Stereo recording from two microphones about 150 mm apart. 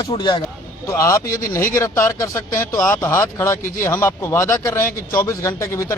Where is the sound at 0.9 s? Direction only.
20° left (ahead or behind).